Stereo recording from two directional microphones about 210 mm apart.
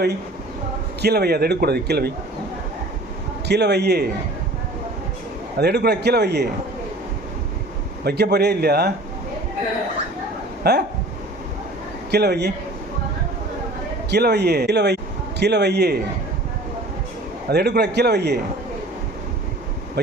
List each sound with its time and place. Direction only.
1.0 s a man's voice: 50° right (ahead or behind)
3.4 s a man's voice: 55° right (ahead or behind)
5.5 s a man's voice: 50° right (ahead or behind)
8.0 s a man's voice: 50° right (ahead or behind)
10.6 s speech: 50° right (ahead or behind)
12.1 s a man's voice: 50° right (ahead or behind)
14.1 s a man's voice: 50° right (ahead or behind)
17.5 s a man's voice: 50° right (ahead or behind)